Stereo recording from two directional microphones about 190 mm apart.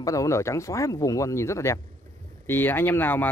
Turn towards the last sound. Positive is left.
turn(degrees=10)  # may be behind; listen again after turning